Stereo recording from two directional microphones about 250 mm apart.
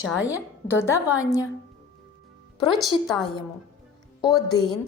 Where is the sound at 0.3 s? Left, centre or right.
Centre.